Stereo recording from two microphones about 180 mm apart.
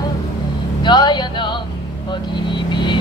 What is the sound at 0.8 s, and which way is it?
Vehicle, 25° left (ahead or behind).